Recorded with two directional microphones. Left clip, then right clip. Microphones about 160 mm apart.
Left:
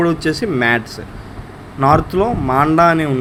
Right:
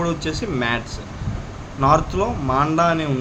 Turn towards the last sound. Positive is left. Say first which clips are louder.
# left 6 dB
turn(degrees=35)  # may be behind; listen again after turning